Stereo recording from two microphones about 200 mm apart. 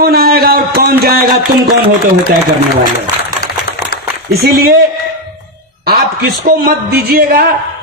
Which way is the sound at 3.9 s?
50° left (ahead or behind).